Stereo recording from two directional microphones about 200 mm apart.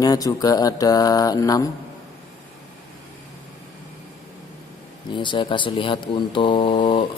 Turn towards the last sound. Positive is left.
turn(degrees=25)  # may be behind; listen again after turning